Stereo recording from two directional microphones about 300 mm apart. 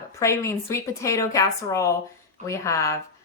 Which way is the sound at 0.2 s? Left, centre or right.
Centre.